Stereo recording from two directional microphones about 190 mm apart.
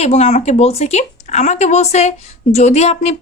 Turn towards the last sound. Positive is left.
turn(degrees=35)  # may be behind; listen again after turning